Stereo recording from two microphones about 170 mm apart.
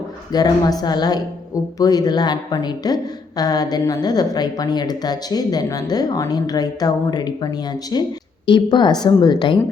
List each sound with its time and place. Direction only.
0.3 s a woman's voice: 25° left (ahead or behind)